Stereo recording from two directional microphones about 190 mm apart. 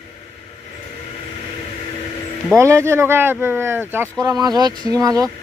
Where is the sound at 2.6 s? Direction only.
15° right (ahead or behind).